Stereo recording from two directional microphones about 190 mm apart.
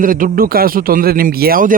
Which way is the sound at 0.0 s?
45° right (ahead or behind).